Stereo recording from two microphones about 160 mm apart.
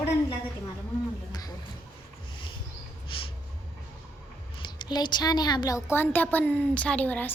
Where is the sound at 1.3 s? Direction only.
25° left (ahead or behind).